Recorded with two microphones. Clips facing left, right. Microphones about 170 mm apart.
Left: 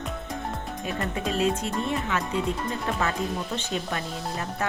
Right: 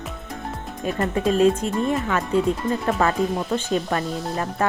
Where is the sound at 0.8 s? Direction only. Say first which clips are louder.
Right 8 dB; 45° right (ahead or behind).